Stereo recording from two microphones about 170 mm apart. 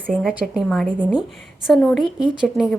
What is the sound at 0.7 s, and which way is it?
Speech, 5° left (ahead or behind).